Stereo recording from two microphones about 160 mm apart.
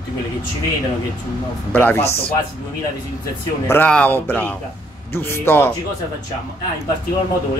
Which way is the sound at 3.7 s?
10° left (ahead or behind).